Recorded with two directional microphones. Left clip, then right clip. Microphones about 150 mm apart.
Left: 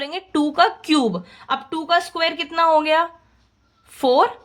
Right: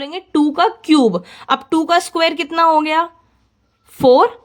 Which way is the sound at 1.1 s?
50° right (ahead or behind).